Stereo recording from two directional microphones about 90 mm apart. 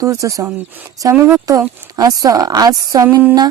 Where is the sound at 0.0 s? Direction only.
35° right (ahead or behind).